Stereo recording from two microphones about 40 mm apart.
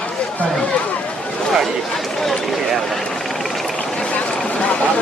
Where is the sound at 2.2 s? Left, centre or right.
Centre.